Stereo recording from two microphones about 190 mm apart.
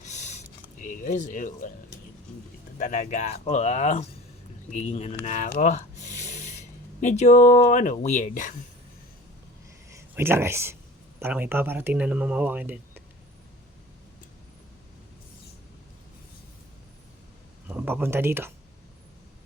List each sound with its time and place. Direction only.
0.0 s a sound: 40° left (ahead or behind)
2.7 s speech: 40° left (ahead or behind)
5.5 s a sound: 40° left (ahead or behind)
7.0 s speech: 40° left (ahead or behind)
9.9 s speech: 15° right (ahead or behind)
17.7 s speech: 10° right (ahead or behind)